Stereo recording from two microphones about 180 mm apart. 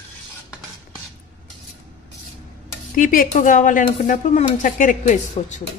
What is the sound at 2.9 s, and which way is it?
Speech, 50° left (ahead or behind).